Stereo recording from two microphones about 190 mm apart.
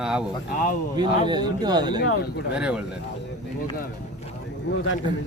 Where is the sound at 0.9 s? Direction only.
20° right (ahead or behind).